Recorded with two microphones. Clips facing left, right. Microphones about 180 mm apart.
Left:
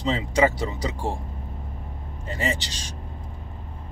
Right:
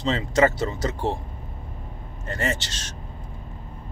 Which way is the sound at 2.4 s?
15° left (ahead or behind).